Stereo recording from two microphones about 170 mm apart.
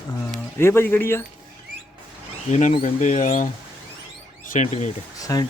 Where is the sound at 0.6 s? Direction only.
15° left (ahead or behind).